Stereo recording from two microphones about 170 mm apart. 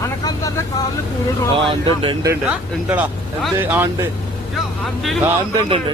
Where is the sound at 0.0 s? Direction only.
20° left (ahead or behind).